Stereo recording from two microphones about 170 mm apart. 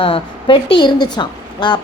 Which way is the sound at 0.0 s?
30° left (ahead or behind).